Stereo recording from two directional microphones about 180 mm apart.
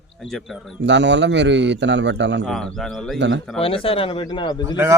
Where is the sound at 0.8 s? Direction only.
80° right.